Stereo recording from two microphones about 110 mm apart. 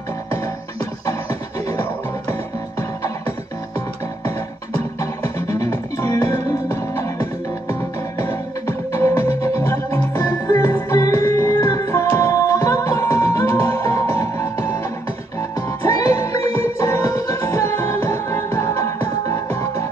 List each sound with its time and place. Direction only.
0.3 s music: 25° left (ahead or behind)
5.0 s music: 25° left (ahead or behind)
15.8 s music: 30° left (ahead or behind)